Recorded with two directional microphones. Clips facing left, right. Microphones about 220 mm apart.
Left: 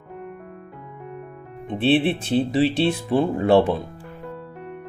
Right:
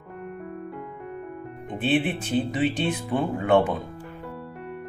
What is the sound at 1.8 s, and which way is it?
Speech, 30° left (ahead or behind).